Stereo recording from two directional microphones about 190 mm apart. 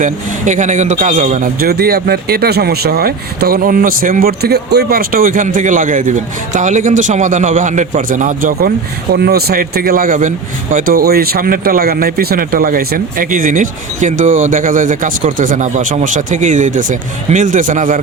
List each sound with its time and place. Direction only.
0.0 s speech: 40° right (ahead or behind)
9.1 s speech: 55° right (ahead or behind)